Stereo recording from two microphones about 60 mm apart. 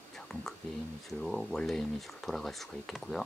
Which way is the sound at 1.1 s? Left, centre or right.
Centre.